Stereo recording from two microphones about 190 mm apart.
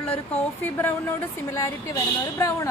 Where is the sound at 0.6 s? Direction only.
10° left (ahead or behind).